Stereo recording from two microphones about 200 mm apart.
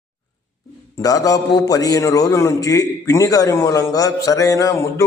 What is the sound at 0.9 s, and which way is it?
A man's voice, 15° left (ahead or behind).